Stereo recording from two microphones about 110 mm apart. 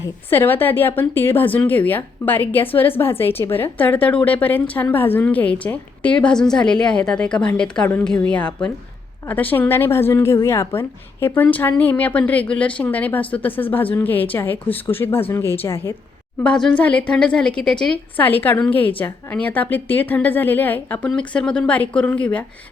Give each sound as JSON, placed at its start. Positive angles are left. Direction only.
{"t": 0.3, "sound": "a woman's voice", "side_deg": 20}
{"t": 16.4, "sound": "a woman's voice", "side_deg": 10}